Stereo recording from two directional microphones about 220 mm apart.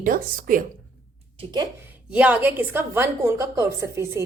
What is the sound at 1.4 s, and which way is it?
A woman's voice, 15° right (ahead or behind).